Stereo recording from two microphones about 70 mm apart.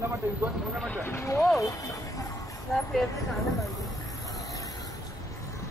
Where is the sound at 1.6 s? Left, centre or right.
Left.